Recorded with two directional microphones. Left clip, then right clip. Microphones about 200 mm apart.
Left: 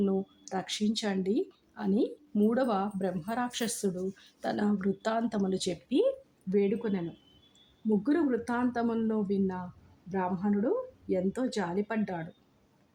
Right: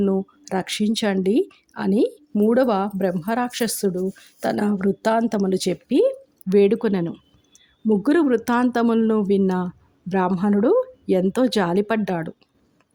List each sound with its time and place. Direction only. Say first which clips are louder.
0.0 s speech: right 9 dB; 35° right (ahead or behind)
6.6 s speech: right 12 dB; 40° right (ahead or behind)